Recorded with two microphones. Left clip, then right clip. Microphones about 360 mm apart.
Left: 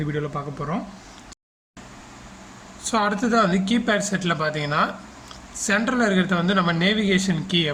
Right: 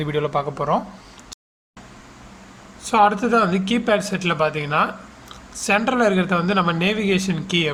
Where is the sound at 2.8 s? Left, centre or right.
Centre.